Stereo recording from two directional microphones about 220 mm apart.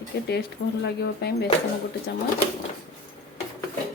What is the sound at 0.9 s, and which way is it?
Speech, 45° left (ahead or behind).